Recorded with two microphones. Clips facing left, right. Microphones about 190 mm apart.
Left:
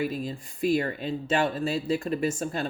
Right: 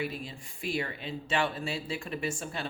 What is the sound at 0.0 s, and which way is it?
Speech, 40° left (ahead or behind).